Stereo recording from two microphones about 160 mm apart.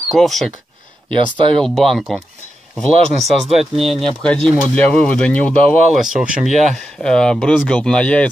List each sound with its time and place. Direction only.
0.1 s speech: centre (ahead or behind)
1.6 s speech: centre (ahead or behind)